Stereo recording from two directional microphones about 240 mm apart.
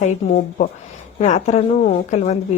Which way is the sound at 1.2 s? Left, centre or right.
Left.